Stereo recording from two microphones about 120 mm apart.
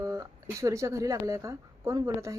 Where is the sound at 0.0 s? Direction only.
25° right (ahead or behind).